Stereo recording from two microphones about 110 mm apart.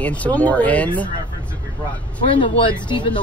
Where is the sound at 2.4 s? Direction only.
45° left (ahead or behind).